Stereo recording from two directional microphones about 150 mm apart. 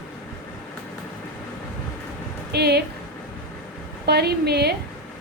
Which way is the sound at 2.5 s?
90° right.